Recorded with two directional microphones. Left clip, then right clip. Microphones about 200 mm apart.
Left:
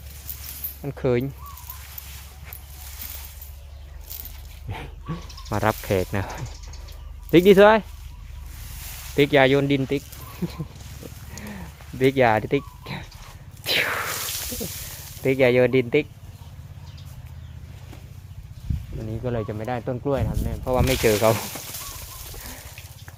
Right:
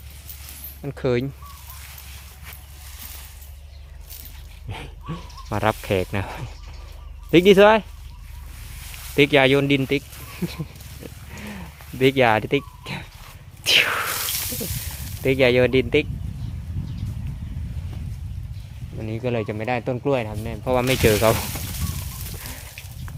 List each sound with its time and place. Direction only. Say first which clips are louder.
0.8 s speech: even; centre (ahead or behind)
4.7 s dog: right 1 dB; centre (ahead or behind)
7.3 s speech: even; centre (ahead or behind)
9.0 s speech: right 1 dB; 10° right (ahead or behind)
11.3 s a sound: right 2 dB; 10° right (ahead or behind)
15.2 s speech: right 1 dB; 5° right (ahead or behind)
19.0 s speech: right 3 dB; 20° right (ahead or behind)